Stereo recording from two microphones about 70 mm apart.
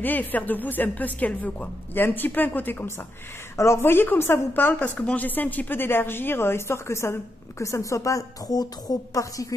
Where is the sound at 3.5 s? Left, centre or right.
Left.